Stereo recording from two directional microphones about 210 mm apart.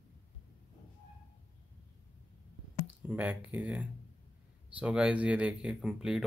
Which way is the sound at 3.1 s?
5° right (ahead or behind).